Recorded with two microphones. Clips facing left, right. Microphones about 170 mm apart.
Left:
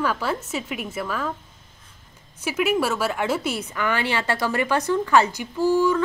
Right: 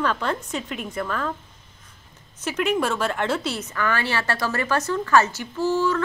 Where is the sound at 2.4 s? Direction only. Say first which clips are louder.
Left 1 dB; 10° left (ahead or behind).